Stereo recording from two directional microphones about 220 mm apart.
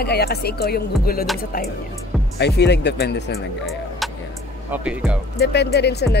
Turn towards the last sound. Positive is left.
turn(degrees=50)  # may be behind; listen again after turning